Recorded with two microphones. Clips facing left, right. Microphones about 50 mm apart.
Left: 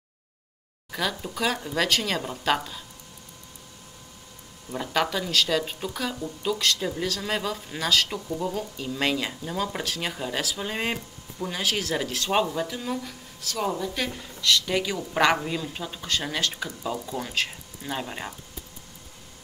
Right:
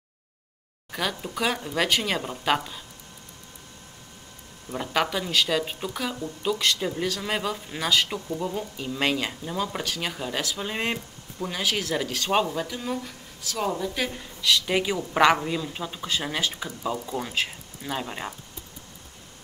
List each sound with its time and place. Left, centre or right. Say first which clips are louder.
0.9 s speech: even; centre
4.8 s speech: even; centre
14.8 s a woman's voice: right 2 dB; centre
15.1 s speech: right 2 dB; centre